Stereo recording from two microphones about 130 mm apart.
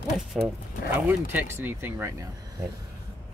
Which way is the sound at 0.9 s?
15° right (ahead or behind).